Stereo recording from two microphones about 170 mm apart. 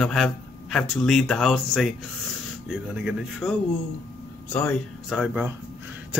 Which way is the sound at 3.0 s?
Centre (ahead or behind).